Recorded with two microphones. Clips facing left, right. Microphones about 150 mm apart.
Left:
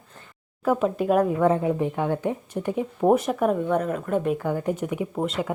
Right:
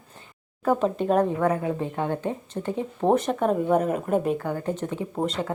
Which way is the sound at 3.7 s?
5° right (ahead or behind).